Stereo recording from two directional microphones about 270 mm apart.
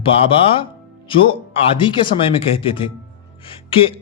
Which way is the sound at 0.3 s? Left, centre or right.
Centre.